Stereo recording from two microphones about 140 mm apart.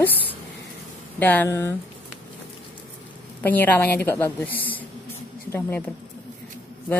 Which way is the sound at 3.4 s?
10° left (ahead or behind).